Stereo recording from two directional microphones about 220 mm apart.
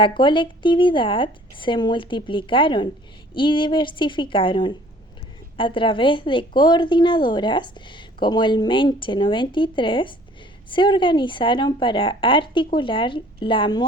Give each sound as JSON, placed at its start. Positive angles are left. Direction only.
{"t": 0.0, "sound": "a woman's voice", "side_deg": 20}